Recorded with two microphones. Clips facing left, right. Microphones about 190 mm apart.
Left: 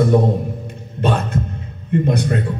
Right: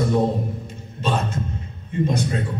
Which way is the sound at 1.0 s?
60° left (ahead or behind).